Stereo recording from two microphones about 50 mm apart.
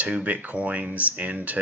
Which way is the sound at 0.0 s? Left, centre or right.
Right.